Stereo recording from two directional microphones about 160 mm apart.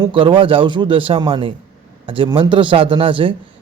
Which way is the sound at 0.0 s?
30° right (ahead or behind).